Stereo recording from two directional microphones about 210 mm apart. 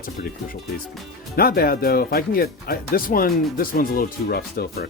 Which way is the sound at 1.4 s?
45° left (ahead or behind).